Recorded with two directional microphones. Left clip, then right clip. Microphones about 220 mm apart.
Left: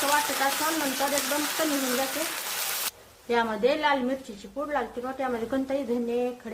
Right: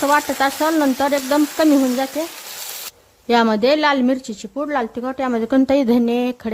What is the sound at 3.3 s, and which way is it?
A woman's voice, 50° right (ahead or behind).